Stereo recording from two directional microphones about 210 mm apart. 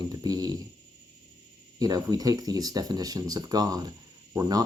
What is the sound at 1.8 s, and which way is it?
Speech, 20° right (ahead or behind).